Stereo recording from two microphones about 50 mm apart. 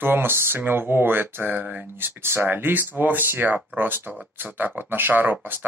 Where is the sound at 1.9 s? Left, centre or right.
Right.